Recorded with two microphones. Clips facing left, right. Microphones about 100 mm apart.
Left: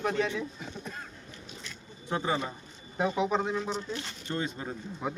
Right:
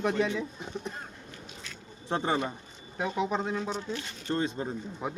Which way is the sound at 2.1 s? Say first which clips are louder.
Right 1 dB; 30° right (ahead or behind).